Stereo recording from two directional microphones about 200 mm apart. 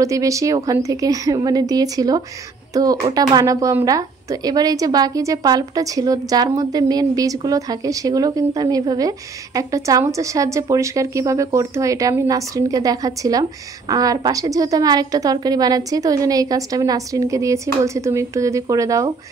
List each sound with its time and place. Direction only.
0.0 s a woman's voice: 15° right (ahead or behind)